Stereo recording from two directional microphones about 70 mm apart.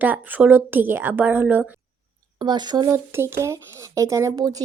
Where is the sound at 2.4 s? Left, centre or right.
Right.